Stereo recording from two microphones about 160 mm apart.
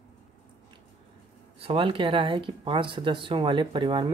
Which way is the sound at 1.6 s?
35° right (ahead or behind).